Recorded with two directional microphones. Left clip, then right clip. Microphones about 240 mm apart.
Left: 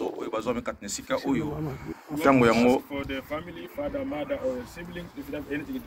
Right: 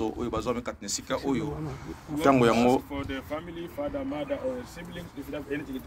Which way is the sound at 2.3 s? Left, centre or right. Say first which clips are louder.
Left 1 dB; right.